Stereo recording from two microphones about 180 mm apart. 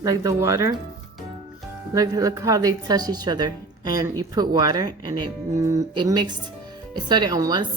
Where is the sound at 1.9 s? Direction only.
20° right (ahead or behind).